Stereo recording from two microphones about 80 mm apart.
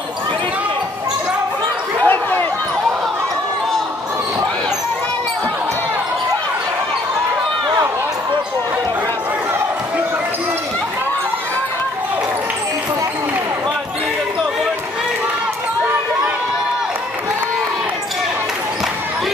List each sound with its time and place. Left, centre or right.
2.0 s basketball bounce: left